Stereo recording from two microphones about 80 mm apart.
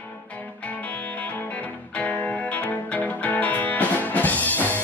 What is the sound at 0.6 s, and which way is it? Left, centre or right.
Music, centre.